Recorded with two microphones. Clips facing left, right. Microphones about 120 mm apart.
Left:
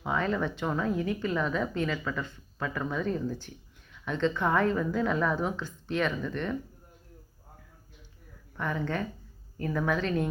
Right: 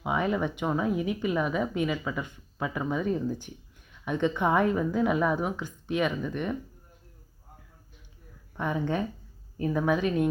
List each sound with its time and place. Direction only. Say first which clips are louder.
0.0 s speech: right 2 dB; 15° right (ahead or behind)
8.5 s speech: right 3 dB; 15° right (ahead or behind)